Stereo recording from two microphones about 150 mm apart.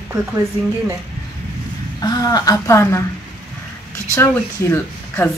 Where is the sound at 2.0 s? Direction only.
25° left (ahead or behind).